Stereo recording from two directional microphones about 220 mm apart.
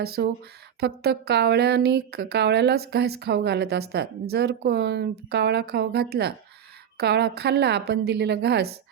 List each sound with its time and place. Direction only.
0.0 s speech: 45° right (ahead or behind)